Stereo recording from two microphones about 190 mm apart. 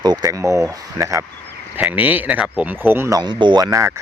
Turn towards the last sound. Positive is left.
turn(degrees=-15)  # may be behind; listen again after turning